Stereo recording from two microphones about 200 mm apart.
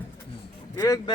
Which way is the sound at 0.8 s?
15° left (ahead or behind).